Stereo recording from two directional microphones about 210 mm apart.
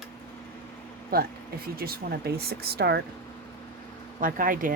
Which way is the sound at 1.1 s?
45° right (ahead or behind).